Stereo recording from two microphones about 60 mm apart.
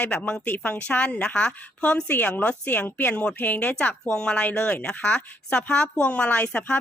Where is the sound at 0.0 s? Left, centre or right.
Left.